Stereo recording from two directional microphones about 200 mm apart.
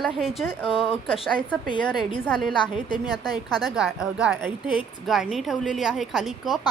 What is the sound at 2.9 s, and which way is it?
Speech, 20° left (ahead or behind).